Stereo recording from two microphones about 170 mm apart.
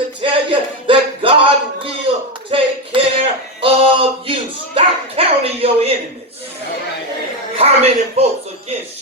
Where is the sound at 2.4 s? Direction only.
30° right (ahead or behind).